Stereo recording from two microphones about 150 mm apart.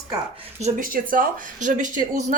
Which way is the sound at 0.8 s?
65° right (ahead or behind).